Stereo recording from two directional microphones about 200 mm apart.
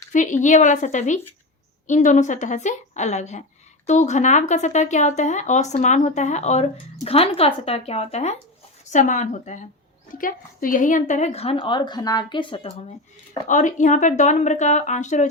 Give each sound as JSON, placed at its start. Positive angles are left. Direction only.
{"t": 0.1, "sound": "a woman's voice", "side_deg": 40}
{"t": 13.5, "sound": "speech", "side_deg": 40}